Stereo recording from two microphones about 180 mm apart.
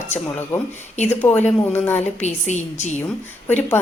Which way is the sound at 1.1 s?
10° left (ahead or behind).